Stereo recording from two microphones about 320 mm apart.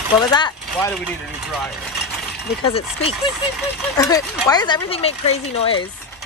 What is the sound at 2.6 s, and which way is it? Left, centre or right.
Speech, centre.